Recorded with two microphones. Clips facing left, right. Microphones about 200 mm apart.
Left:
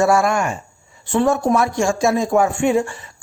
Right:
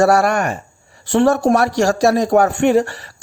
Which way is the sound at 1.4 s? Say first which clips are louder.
Right 3 dB; 70° right (ahead or behind).